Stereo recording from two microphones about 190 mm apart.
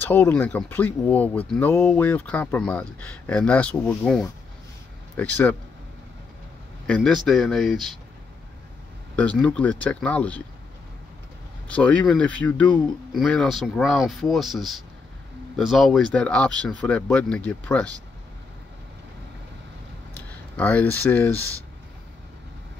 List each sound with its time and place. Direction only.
0.0 s speech: 10° left (ahead or behind)
6.9 s speech: 5° left (ahead or behind)
9.1 s speech: 5° left (ahead or behind)
11.6 s speech: 5° left (ahead or behind)
20.2 s speech: 10° left (ahead or behind)